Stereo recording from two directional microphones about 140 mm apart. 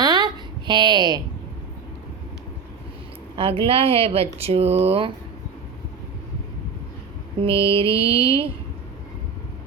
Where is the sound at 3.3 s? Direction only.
40° right (ahead or behind).